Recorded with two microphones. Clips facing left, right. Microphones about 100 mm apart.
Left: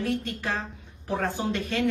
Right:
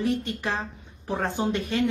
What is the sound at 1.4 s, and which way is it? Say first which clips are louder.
Speech: right 3 dB; 25° right (ahead or behind).